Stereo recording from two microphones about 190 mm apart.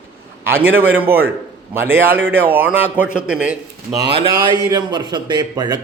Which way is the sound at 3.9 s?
25° right (ahead or behind).